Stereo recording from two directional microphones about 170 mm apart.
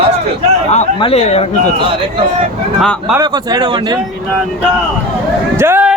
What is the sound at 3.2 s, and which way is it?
Speech, 25° right (ahead or behind).